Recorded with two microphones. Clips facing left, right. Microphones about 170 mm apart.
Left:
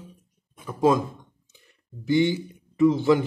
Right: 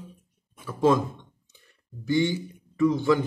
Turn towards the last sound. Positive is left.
turn(degrees=25)  # may be behind; listen again after turning